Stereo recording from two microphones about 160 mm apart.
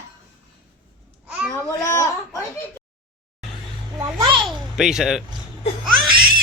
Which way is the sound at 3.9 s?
25° right (ahead or behind).